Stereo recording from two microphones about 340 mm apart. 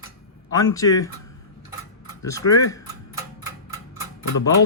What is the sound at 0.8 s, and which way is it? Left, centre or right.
Speech, centre.